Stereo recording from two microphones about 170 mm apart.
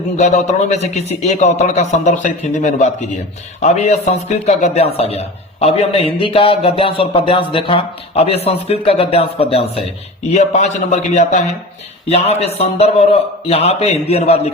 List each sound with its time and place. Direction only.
0.2 s a man's voice: 45° left (ahead or behind)